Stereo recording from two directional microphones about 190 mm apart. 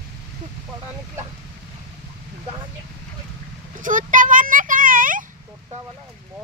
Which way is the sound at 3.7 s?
45° right (ahead or behind).